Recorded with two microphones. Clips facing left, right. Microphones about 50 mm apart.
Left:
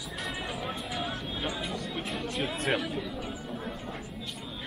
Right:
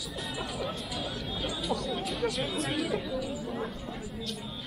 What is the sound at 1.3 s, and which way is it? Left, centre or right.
Chatter, left.